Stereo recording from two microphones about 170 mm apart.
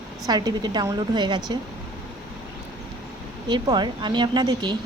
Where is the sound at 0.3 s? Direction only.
25° right (ahead or behind).